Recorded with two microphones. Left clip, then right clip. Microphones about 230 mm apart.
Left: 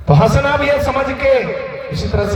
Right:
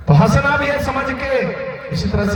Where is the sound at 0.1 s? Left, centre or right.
Centre.